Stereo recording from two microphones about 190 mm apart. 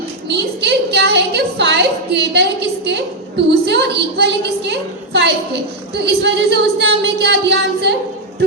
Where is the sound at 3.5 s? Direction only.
65° right (ahead or behind).